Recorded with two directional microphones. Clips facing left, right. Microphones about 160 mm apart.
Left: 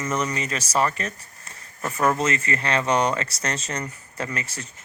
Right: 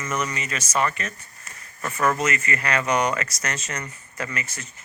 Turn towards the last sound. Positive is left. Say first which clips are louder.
# left 1 dB
turn(degrees=35)  # may be behind; listen again after turning